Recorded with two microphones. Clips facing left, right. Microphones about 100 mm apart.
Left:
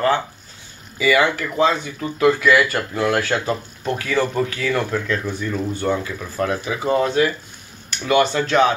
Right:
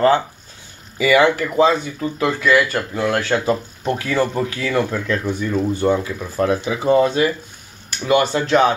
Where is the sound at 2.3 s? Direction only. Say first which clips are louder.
Left 1 dB; 5° left (ahead or behind).